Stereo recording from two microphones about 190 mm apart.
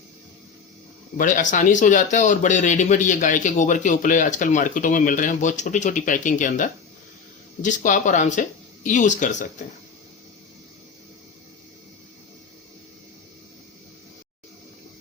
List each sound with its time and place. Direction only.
1.1 s speech: 45° left (ahead or behind)